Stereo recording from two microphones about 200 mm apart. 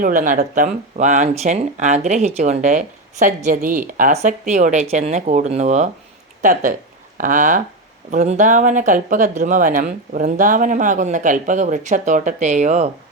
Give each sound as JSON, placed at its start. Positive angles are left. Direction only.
{"t": 0.0, "sound": "speech", "side_deg": -40}